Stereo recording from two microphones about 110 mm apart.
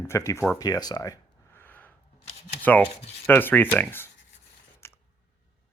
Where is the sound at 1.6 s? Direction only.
15° left (ahead or behind).